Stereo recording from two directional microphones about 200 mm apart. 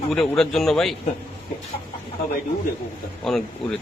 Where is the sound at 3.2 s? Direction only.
Centre (ahead or behind).